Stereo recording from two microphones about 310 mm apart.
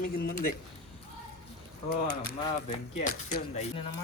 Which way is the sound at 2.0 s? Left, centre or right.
Left.